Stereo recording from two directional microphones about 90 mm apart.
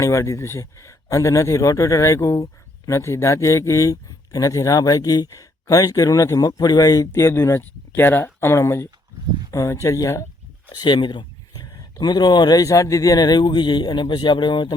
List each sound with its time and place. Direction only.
0.0 s speech: 35° left (ahead or behind)
7.1 s speech: 25° left (ahead or behind)
10.7 s speech: 50° left (ahead or behind)